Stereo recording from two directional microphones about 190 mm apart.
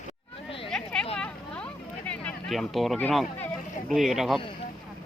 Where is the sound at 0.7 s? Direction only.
5° left (ahead or behind).